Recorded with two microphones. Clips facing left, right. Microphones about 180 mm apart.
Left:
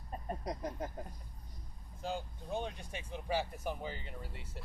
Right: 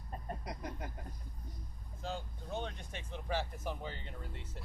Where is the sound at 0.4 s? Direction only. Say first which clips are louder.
Left 4 dB; 35° left (ahead or behind).